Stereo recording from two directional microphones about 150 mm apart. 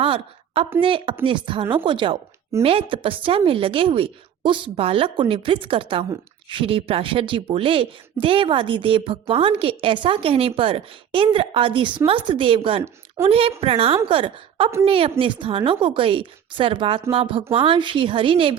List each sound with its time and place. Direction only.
0.0 s a woman's voice: 40° right (ahead or behind)